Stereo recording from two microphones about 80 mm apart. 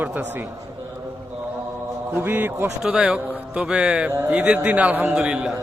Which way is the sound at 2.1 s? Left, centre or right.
Right.